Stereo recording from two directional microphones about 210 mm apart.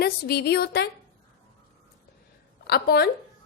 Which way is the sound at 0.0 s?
50° left (ahead or behind).